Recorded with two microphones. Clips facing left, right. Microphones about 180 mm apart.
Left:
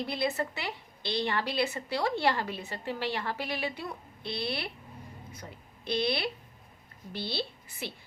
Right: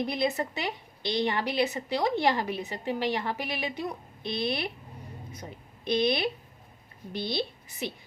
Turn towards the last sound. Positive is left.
turn(degrees=-15)  # may be behind; listen again after turning